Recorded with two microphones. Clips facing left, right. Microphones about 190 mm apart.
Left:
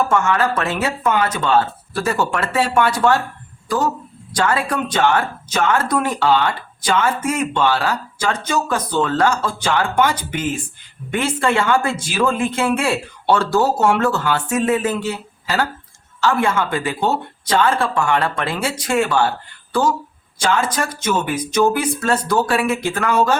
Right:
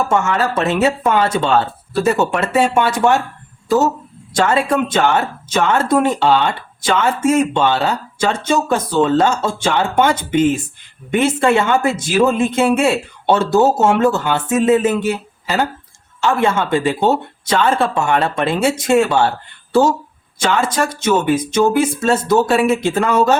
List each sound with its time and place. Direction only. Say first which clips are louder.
0.1 s speech: right 1 dB; 25° right (ahead or behind)
20.4 s speech: right 2 dB; 25° right (ahead or behind)